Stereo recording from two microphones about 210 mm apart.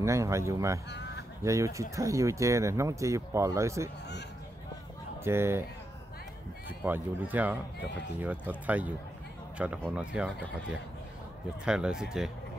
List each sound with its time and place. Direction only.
0.0 s speech: 15° right (ahead or behind)
0.8 s honk: 55° left (ahead or behind)
1.4 s speech: 15° right (ahead or behind)
5.2 s speech: 10° right (ahead or behind)
6.8 s speech: 10° right (ahead or behind)